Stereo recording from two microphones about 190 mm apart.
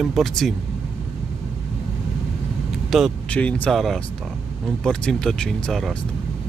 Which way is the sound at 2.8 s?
Centre (ahead or behind).